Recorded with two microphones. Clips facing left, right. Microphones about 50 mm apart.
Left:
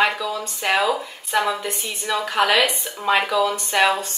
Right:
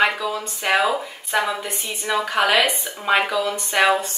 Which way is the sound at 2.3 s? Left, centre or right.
Centre.